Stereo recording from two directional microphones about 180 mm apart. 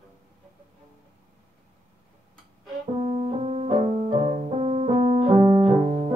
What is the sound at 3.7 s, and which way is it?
Piano, 35° right (ahead or behind).